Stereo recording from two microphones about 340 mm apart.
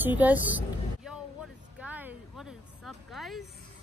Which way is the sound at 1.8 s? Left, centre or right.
Centre.